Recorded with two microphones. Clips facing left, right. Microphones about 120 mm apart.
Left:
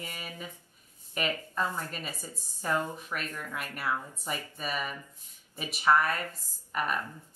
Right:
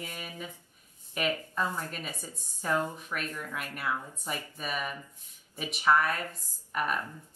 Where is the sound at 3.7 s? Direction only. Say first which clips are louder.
Left 1 dB; 5° left (ahead or behind).